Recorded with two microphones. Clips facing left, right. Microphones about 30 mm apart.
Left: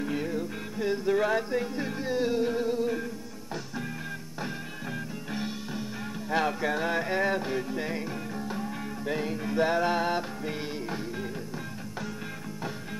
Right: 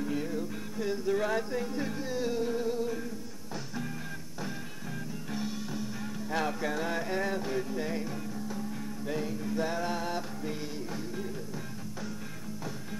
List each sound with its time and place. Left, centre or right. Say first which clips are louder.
0.0 s music: left 2 dB; left
5.3 s music: left 1 dB; left
8.4 s music: left 3 dB; left